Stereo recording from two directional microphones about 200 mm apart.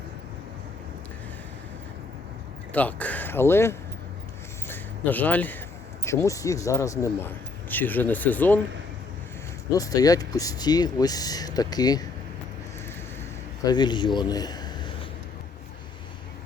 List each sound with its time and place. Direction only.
2.7 s speech: 10° left (ahead or behind)
9.7 s speech: 20° left (ahead or behind)
13.7 s speech: 20° left (ahead or behind)